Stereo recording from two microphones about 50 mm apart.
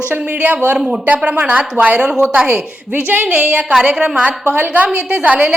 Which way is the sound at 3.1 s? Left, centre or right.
Right.